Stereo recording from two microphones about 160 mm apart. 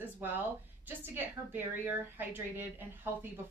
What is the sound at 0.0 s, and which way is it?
A woman's voice, 10° right (ahead or behind).